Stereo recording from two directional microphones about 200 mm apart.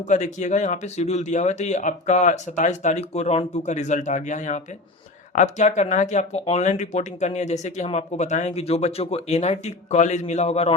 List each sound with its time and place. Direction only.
0.0 s speech: 35° left (ahead or behind)